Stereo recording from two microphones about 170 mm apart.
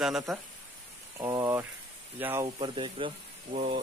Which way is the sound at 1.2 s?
20° right (ahead or behind).